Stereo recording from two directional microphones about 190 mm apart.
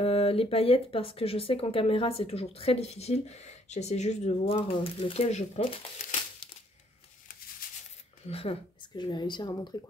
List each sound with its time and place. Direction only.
0.0 s speech: 30° left (ahead or behind)
7.6 s a sound: 50° left (ahead or behind)
8.3 s speech: 30° left (ahead or behind)